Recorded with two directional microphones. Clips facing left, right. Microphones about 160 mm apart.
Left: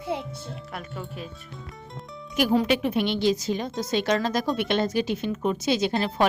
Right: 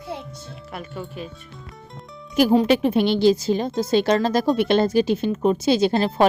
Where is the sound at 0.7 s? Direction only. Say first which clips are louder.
Right 6 dB; centre (ahead or behind).